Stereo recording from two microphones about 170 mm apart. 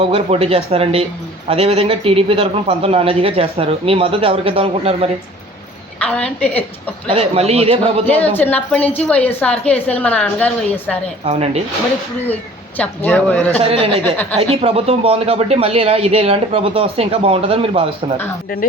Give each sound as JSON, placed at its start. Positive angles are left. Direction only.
{"t": 0.0, "sound": "speech", "side_deg": -35}
{"t": 6.0, "sound": "a woman's voice", "side_deg": 5}
{"t": 7.1, "sound": "speech", "side_deg": -35}
{"t": 8.0, "sound": "a woman's voice", "side_deg": 10}
{"t": 11.3, "sound": "speech", "side_deg": -40}
{"t": 12.3, "sound": "a woman's voice", "side_deg": 10}
{"t": 13.6, "sound": "speech", "side_deg": -35}
{"t": 14.0, "sound": "a woman's voice", "side_deg": 10}
{"t": 14.3, "sound": "speech", "side_deg": -35}